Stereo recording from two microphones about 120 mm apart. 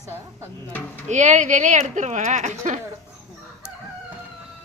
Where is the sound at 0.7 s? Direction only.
15° left (ahead or behind).